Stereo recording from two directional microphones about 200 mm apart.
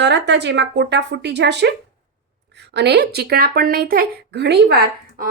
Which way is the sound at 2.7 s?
55° right (ahead or behind).